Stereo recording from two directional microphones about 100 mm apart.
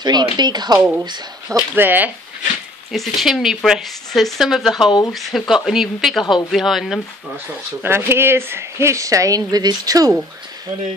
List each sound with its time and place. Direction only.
0.0 s speech: 45° right (ahead or behind)
0.7 s speech: 10° right (ahead or behind)
1.0 s speech: 45° right (ahead or behind)
1.8 s speech: 20° right (ahead or behind)
2.9 s speech: centre (ahead or behind)
7.8 s speech: 25° right (ahead or behind); by 10.1 s 40° right (ahead or behind)